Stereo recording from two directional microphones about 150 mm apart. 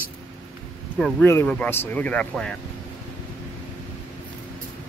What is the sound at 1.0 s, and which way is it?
Speech, centre (ahead or behind).